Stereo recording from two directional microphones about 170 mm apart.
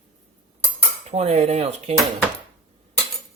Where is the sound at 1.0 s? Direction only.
40° right (ahead or behind).